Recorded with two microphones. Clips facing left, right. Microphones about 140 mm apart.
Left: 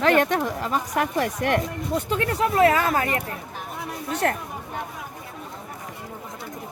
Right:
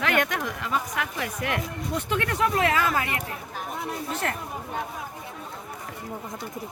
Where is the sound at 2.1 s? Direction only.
35° left (ahead or behind).